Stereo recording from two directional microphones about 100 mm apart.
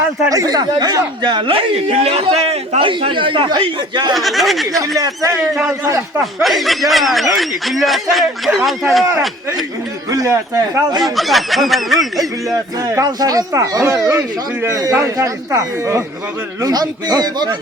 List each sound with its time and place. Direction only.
0.3 s speech: 40° right (ahead or behind)
4.1 s speech: centre (ahead or behind)
4.8 s a man's voice: 35° right (ahead or behind)
6.4 s speech: centre (ahead or behind)
10.1 s a man's voice: 30° right (ahead or behind)
11.0 s speech: centre (ahead or behind)
12.5 s speech: 35° right (ahead or behind)